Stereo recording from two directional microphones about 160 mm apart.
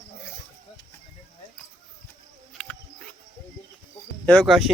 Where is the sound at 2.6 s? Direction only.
5° left (ahead or behind).